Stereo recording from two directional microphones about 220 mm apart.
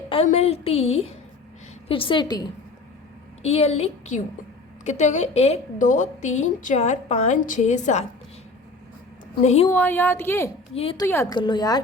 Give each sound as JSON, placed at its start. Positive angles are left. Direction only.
{"t": 0.1, "sound": "a woman's voice", "side_deg": 30}
{"t": 9.4, "sound": "a woman's voice", "side_deg": 30}
{"t": 9.6, "sound": "speech", "side_deg": 10}
{"t": 10.8, "sound": "a woman's voice", "side_deg": 25}
{"t": 11.0, "sound": "speech", "side_deg": 10}